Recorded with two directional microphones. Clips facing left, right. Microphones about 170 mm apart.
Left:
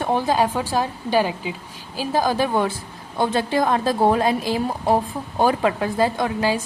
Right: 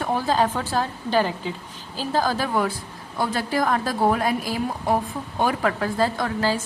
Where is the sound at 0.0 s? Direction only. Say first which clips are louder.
Left 2 dB; 20° left (ahead or behind).